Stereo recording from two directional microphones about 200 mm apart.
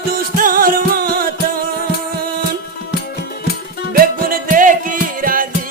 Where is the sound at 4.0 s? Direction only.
45° right (ahead or behind).